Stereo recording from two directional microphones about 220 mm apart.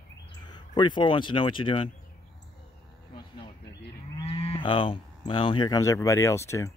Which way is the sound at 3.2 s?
25° left (ahead or behind).